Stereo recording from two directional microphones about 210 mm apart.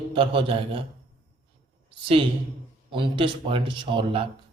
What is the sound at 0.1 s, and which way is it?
Speech, 25° right (ahead or behind).